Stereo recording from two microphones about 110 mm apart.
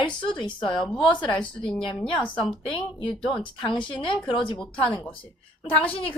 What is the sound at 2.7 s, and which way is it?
A woman's voice, 55° left (ahead or behind).